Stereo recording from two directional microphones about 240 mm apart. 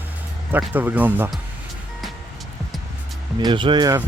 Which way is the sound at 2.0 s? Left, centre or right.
Centre.